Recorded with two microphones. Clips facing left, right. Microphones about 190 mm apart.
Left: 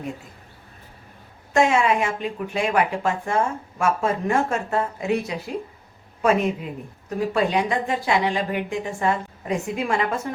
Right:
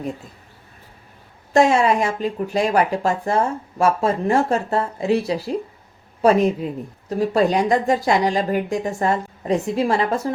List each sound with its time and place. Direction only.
1.5 s speech: 35° right (ahead or behind)